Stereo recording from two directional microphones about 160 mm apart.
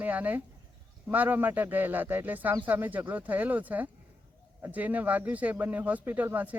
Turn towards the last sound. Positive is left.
turn(degrees=-10)  # may be behind; listen again after turning